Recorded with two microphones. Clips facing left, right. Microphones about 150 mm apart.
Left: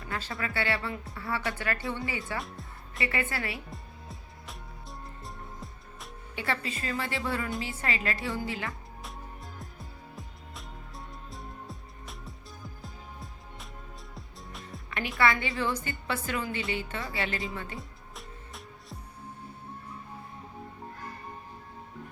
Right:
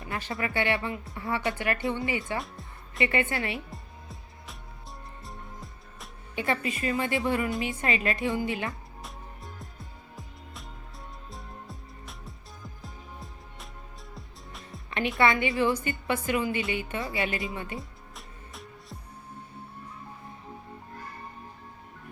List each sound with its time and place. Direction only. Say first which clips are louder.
0.1 s a woman's voice: right 3 dB; 20° right (ahead or behind)
2.4 s music: even; centre (ahead or behind)
3.0 s a woman's voice: right 5 dB; 25° right (ahead or behind)
3.7 s music: even; centre (ahead or behind)
6.3 s a woman's voice: right 4 dB; 20° right (ahead or behind)
9.0 s music: left 1 dB; centre (ahead or behind)
14.8 s music: right 6 dB; 25° right (ahead or behind)
15.2 s a woman's voice: right 3 dB; 20° right (ahead or behind)
17.7 s music: right 2 dB; centre (ahead or behind)